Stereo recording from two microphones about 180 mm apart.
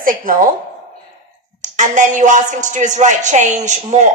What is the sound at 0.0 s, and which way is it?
Speech, 50° right (ahead or behind).